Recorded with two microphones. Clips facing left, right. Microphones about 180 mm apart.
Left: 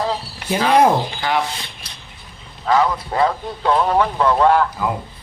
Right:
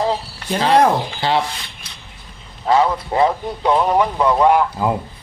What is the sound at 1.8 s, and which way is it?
Vehicle, 35° left (ahead or behind).